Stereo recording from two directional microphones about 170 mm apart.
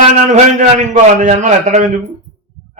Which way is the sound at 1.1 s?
45° right (ahead or behind).